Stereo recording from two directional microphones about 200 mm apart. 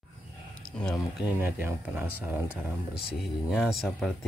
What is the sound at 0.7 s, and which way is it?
Speech, 5° left (ahead or behind).